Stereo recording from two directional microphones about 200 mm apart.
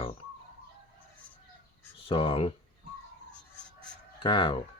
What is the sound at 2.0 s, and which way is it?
Speech, 25° left (ahead or behind).